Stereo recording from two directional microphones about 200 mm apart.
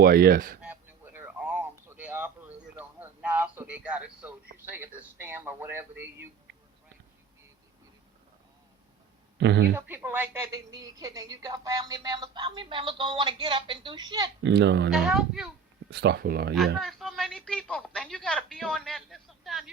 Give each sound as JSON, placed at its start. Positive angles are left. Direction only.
{"t": 0.0, "sound": "speech", "side_deg": -50}
{"t": 0.6, "sound": "a sound", "side_deg": -10}
{"t": 4.5, "sound": "speech", "side_deg": -10}
{"t": 9.4, "sound": "speech", "side_deg": -60}
{"t": 9.7, "sound": "a woman's voice", "side_deg": -10}
{"t": 14.4, "sound": "speech", "side_deg": -60}
{"t": 14.9, "sound": "a woman's voice", "side_deg": 0}
{"t": 15.9, "sound": "speech", "side_deg": -55}
{"t": 16.7, "sound": "speech", "side_deg": 0}